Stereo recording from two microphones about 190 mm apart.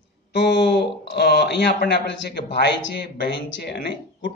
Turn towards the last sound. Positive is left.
turn(degrees=55)  # may be behind; listen again after turning